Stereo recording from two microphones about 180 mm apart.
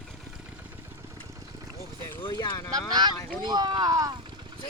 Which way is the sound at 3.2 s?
20° left (ahead or behind).